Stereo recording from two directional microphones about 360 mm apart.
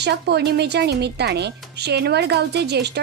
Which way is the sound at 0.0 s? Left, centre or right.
Right.